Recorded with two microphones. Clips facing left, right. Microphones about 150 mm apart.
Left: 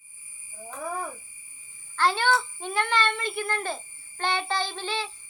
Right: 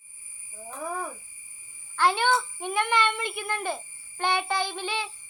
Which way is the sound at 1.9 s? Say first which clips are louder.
Even; 15° right (ahead or behind).